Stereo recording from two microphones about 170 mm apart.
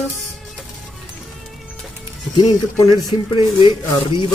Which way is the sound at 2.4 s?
25° left (ahead or behind).